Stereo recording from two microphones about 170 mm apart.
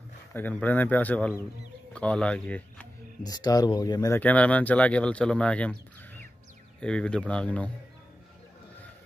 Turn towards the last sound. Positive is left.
turn(degrees=10)  # may be behind; listen again after turning